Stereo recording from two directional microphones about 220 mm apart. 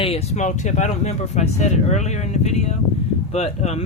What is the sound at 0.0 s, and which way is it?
Speech, 25° left (ahead or behind).